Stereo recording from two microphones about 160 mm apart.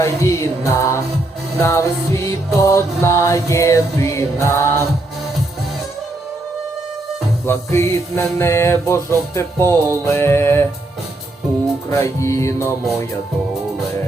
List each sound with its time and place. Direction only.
0.0 s mantra: 20° left (ahead or behind)
1.5 s music: 15° left (ahead or behind)
7.4 s music: 15° left (ahead or behind)
11.9 s music: 20° left (ahead or behind)